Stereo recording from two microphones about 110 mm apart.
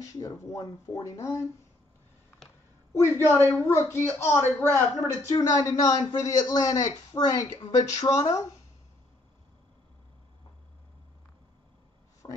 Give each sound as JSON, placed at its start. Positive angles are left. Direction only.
{"t": 0.0, "sound": "speech", "side_deg": 30}
{"t": 2.9, "sound": "a man's voice", "side_deg": 25}
{"t": 12.2, "sound": "a sound", "side_deg": 40}